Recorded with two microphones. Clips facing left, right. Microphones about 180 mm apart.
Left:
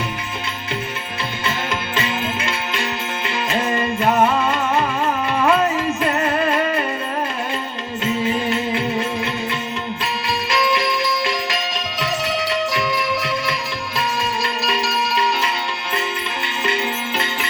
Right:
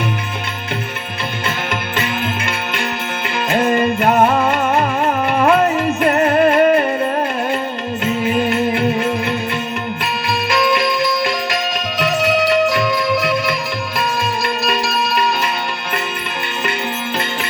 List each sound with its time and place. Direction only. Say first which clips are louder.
3.5 s music: right 7 dB; 55° right (ahead or behind)